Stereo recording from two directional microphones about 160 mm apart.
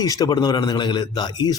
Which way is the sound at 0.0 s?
25° left (ahead or behind).